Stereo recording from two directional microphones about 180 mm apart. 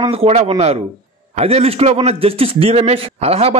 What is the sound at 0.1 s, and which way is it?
Speech, 30° right (ahead or behind).